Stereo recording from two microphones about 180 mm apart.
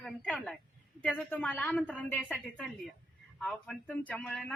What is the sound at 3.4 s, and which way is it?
Speech, 5° left (ahead or behind).